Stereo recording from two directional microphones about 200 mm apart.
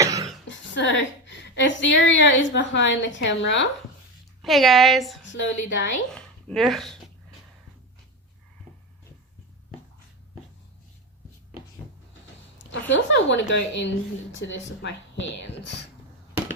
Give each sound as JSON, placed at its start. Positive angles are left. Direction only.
{"t": 0.0, "sound": "a sound", "side_deg": -15}
{"t": 0.4, "sound": "a woman's voice", "side_deg": 65}
{"t": 4.4, "sound": "a woman's voice", "side_deg": 0}
{"t": 5.2, "sound": "speech", "side_deg": 65}
{"t": 6.1, "sound": "speech", "side_deg": 5}
{"t": 12.9, "sound": "speech", "side_deg": 65}